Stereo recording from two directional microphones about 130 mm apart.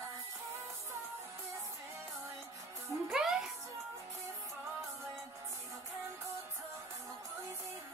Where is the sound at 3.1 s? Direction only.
5° right (ahead or behind).